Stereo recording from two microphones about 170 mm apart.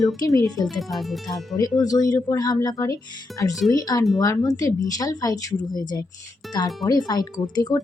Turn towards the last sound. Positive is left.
turn(degrees=25)  # may be behind; listen again after turning